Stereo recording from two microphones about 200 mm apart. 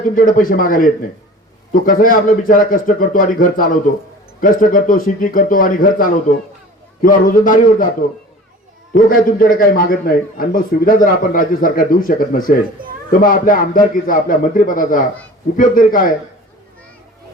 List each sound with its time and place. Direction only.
0.2 s a man's voice: 45° left (ahead or behind)
9.0 s a man's voice: 45° left (ahead or behind)